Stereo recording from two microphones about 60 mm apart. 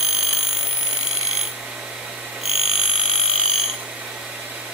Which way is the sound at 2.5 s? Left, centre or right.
Centre.